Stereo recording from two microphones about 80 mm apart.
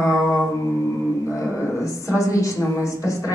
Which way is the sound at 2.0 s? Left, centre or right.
Left.